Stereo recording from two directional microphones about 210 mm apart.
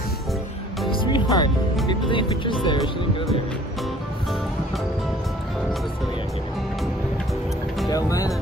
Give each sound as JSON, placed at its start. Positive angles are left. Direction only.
{"t": 0.9, "sound": "music", "side_deg": 20}
{"t": 1.9, "sound": "speech", "side_deg": 25}
{"t": 7.9, "sound": "speech", "side_deg": 15}